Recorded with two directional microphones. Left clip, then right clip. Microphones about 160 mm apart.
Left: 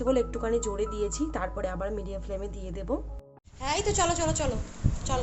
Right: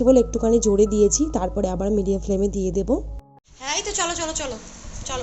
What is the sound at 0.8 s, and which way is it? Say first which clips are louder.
Speech: right 13 dB; 40° right (ahead or behind).